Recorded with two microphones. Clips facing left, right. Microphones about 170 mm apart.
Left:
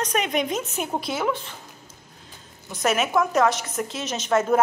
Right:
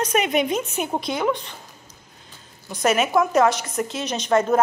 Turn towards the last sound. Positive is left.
turn(degrees=5)  # may be behind; listen again after turning